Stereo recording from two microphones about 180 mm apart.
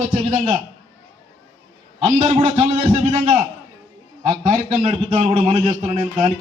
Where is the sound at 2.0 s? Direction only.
35° right (ahead or behind).